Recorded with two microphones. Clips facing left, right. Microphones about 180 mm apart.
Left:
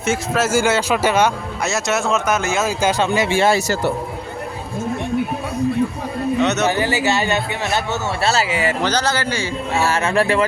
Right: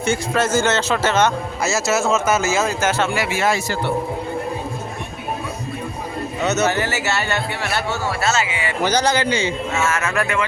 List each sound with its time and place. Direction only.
0.0 s a man's voice: 5° left (ahead or behind)
1.6 s speech: centre (ahead or behind)
2.6 s speech: 15° left (ahead or behind); by 3.9 s 35° left (ahead or behind)
6.4 s speech: centre (ahead or behind)
6.7 s a man's voice: 15° left (ahead or behind)
8.2 s speech: 35° left (ahead or behind)
8.8 s a man's voice: 10° right (ahead or behind)
9.7 s speech: 35° left (ahead or behind)